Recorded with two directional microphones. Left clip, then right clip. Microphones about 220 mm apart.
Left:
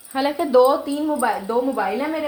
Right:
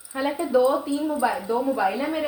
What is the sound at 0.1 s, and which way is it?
Speech, 45° left (ahead or behind).